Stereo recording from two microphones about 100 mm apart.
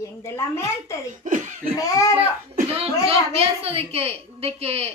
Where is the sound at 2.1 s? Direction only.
80° right.